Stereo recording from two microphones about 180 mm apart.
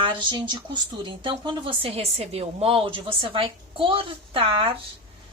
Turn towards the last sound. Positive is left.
turn(degrees=-30)  # may be behind; listen again after turning